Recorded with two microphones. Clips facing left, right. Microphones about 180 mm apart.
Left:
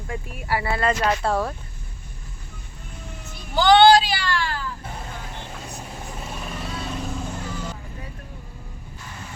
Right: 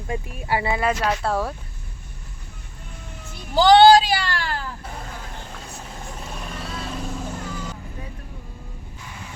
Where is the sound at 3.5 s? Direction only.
35° right (ahead or behind).